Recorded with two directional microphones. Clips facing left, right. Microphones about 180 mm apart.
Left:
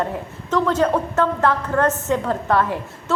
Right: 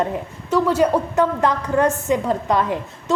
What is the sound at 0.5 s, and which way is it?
A woman's voice, 10° right (ahead or behind).